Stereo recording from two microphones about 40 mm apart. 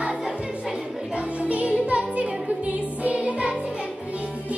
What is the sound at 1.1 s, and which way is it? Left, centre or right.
Music, right.